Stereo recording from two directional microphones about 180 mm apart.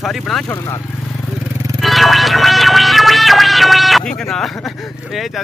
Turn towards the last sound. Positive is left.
turn(degrees=0)  # may be behind; listen again after turning